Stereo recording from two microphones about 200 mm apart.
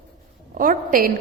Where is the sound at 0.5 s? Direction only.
40° right (ahead or behind).